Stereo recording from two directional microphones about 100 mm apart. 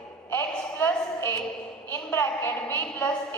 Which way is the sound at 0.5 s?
20° left (ahead or behind).